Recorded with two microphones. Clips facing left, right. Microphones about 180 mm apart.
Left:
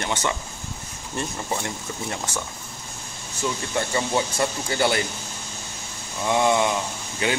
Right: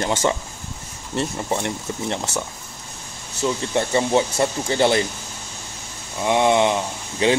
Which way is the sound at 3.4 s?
25° right (ahead or behind).